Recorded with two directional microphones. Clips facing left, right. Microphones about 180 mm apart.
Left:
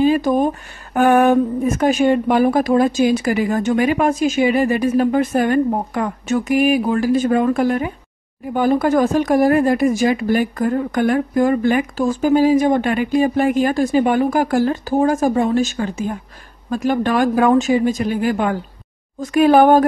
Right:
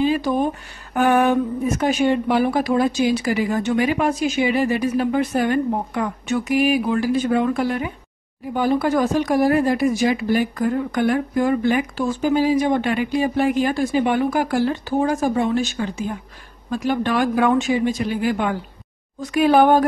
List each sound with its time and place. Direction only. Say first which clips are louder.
0.0 s speech: left 4 dB; 50° left (ahead or behind)